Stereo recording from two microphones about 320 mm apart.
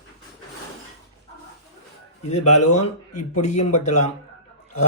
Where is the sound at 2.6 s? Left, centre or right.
Left.